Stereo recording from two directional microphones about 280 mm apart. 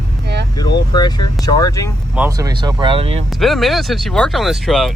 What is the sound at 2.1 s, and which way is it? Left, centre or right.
Speech, centre.